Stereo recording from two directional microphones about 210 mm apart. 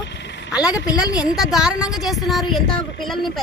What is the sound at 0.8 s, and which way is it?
Speech, 20° left (ahead or behind).